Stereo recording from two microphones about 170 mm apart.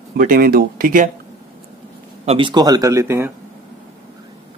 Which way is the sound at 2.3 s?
30° right (ahead or behind).